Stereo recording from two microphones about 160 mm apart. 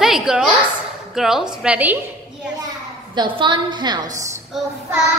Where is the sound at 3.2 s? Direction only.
30° right (ahead or behind).